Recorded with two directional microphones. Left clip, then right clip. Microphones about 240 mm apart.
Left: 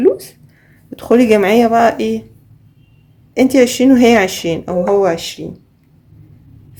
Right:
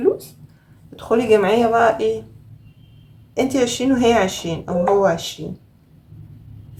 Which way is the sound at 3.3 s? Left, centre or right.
Left.